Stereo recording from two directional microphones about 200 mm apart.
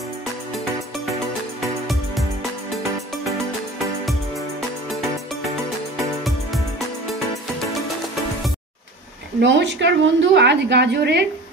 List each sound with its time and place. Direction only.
3.8 s music: centre (ahead or behind)
9.4 s a woman's voice: 60° right (ahead or behind)